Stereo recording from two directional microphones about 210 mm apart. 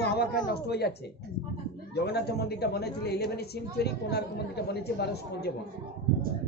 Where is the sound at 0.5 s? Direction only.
50° left (ahead or behind).